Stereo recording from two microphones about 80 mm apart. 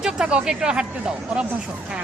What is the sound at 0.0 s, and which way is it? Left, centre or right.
Speech, centre.